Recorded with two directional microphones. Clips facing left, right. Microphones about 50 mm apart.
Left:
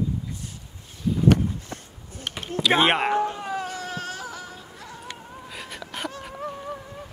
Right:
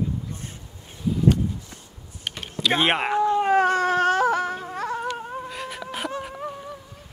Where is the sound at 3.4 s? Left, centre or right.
Right.